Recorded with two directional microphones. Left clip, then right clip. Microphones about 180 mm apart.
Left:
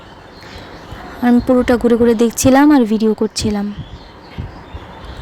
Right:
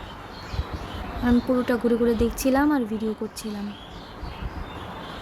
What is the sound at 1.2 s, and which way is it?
Speech, 45° left (ahead or behind).